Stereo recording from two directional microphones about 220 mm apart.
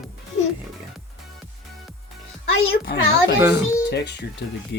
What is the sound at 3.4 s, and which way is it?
Speech, 15° right (ahead or behind).